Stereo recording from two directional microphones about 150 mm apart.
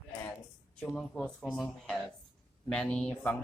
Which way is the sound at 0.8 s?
5° left (ahead or behind).